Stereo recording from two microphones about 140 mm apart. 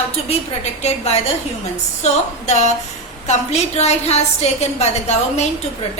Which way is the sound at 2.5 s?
55° left (ahead or behind).